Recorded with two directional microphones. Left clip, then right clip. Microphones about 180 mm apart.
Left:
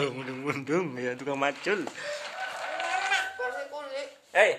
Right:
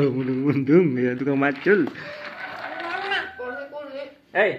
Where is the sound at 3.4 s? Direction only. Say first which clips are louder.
Even; 45° left (ahead or behind).